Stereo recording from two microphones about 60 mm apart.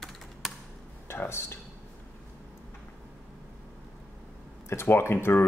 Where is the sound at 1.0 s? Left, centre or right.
Left.